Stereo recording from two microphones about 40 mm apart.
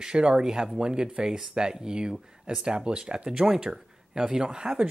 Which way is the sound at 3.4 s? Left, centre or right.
Centre.